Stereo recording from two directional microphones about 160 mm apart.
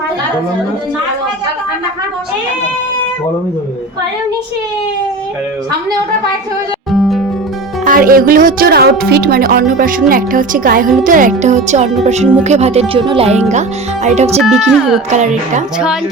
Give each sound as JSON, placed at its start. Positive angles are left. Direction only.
{"t": 6.9, "sound": "music", "side_deg": 0}
{"t": 7.9, "sound": "speech", "side_deg": -60}
{"t": 14.4, "sound": "speech", "side_deg": 0}
{"t": 15.1, "sound": "speech", "side_deg": -45}